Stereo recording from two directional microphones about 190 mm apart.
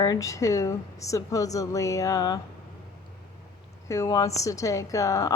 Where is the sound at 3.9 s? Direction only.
20° left (ahead or behind).